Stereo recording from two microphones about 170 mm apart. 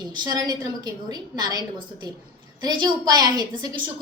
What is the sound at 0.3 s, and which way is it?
A woman's voice, 25° right (ahead or behind).